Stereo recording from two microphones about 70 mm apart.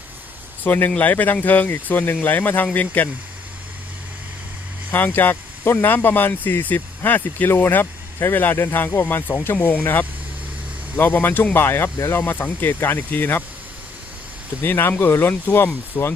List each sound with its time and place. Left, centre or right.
0.6 s speech: left
4.9 s speech: left
14.6 s speech: left